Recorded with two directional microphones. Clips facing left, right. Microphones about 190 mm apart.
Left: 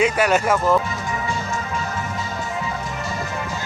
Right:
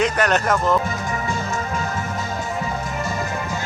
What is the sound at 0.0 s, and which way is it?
Speech, 10° left (ahead or behind).